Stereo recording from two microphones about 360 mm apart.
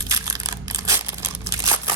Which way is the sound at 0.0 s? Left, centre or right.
Centre.